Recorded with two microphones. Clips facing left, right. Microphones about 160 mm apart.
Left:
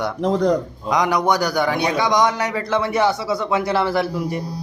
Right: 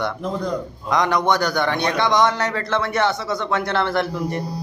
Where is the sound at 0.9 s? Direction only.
10° left (ahead or behind).